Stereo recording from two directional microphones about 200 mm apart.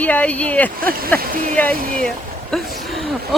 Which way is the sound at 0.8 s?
45° right (ahead or behind).